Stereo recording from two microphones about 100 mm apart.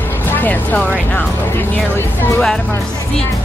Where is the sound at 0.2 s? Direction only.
20° left (ahead or behind).